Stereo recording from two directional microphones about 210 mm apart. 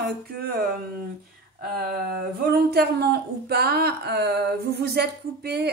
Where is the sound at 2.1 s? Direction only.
50° right (ahead or behind).